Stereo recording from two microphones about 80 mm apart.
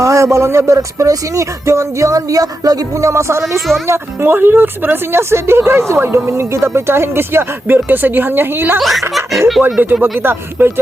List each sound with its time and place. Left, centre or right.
0.0 s a woman's voice: right
8.8 s laughter: centre
9.8 s a woman's voice: right